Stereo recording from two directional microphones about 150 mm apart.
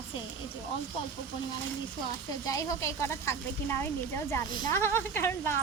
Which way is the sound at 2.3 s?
20° left (ahead or behind).